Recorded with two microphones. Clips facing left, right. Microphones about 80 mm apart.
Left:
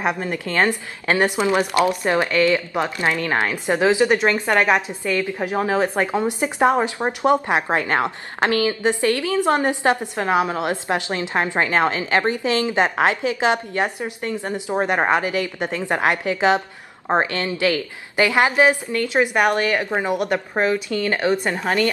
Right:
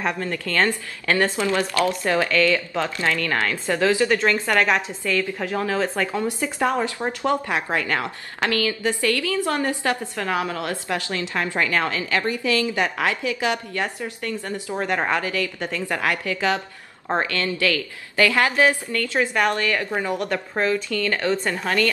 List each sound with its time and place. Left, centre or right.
0.0 s speech: centre